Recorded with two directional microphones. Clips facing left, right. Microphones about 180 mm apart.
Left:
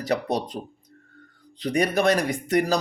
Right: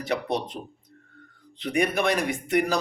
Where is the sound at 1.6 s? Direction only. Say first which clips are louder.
Left 3 dB; 40° left (ahead or behind).